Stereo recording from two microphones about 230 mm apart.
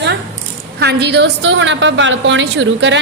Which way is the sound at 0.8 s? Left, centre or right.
Right.